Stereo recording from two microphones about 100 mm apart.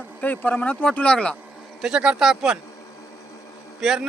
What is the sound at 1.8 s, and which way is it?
Speech, 5° right (ahead or behind).